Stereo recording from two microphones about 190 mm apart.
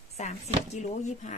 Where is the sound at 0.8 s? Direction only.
35° left (ahead or behind).